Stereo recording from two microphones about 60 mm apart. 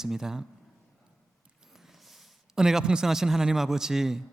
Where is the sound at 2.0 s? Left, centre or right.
Centre.